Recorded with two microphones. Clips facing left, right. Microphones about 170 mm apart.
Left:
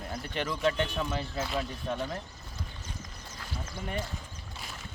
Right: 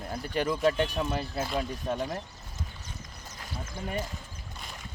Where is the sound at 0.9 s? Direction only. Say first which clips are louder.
Right 2 dB; 10° right (ahead or behind).